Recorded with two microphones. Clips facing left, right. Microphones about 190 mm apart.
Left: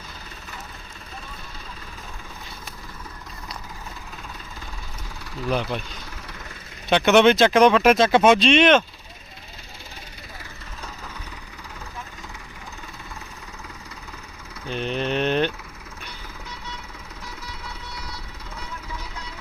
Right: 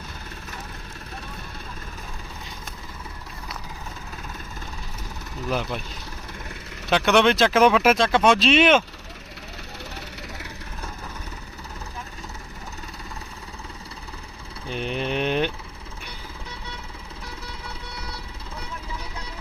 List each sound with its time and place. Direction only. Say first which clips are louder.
5.5 s speech: left 2 dB; 5° right (ahead or behind)
6.9 s speech: left 3 dB; centre (ahead or behind)
14.7 s a sound: left 2 dB; 10° right (ahead or behind)